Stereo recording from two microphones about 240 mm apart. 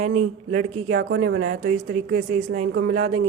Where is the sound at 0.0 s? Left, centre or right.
Right.